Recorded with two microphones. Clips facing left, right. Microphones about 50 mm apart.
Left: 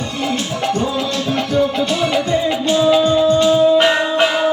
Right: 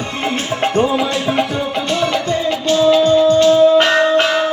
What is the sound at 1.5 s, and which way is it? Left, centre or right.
Music, centre.